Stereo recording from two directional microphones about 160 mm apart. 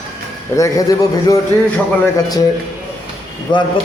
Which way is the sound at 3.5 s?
30° left (ahead or behind).